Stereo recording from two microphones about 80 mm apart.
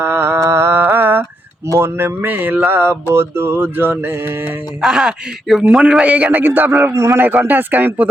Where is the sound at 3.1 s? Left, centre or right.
Right.